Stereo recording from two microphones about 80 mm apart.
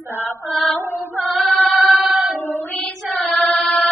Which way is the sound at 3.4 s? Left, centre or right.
Centre.